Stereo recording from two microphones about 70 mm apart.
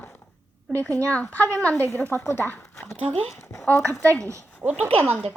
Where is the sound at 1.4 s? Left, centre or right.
Left.